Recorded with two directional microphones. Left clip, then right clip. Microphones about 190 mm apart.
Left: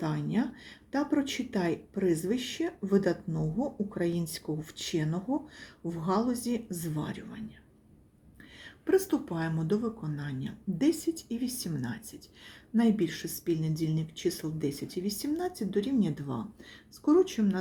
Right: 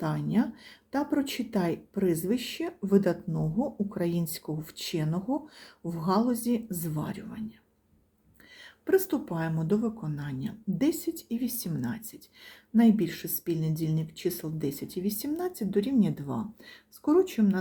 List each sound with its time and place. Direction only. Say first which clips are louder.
0.0 s a woman's voice: right 2 dB; 20° right (ahead or behind)
8.6 s a woman's voice: right 1 dB; 15° right (ahead or behind)